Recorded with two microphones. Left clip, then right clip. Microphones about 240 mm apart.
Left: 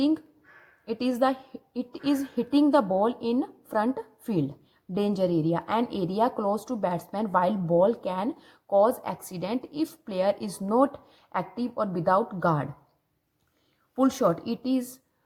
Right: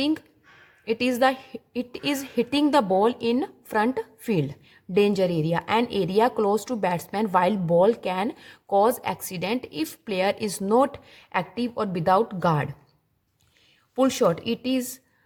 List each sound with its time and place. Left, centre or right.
0.9 s speech: right
13.9 s speech: right